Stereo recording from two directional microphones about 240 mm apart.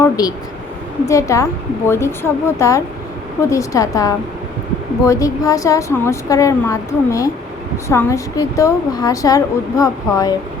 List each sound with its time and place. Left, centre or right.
0.0 s a woman's voice: centre